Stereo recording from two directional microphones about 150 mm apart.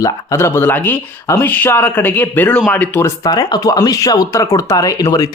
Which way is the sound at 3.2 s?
25° left (ahead or behind).